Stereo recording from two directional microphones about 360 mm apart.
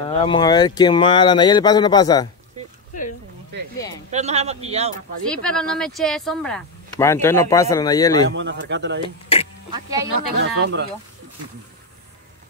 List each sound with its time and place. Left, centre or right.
0.0 s speech: centre
4.1 s a man's voice: centre
4.9 s speech: centre
8.4 s speech: right
9.0 s speech: centre
10.3 s speech: right